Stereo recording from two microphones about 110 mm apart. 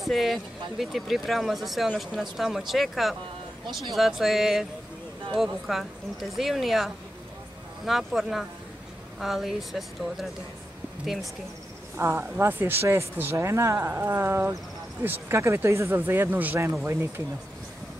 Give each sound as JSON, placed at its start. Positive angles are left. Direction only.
{"t": 0.0, "sound": "speech", "side_deg": 0}
{"t": 12.0, "sound": "speech", "side_deg": -25}